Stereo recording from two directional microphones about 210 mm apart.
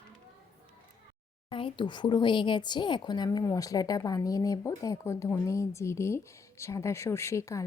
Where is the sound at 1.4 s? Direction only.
25° left (ahead or behind).